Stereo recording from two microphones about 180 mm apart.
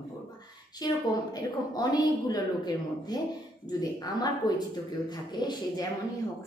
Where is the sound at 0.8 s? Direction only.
20° left (ahead or behind).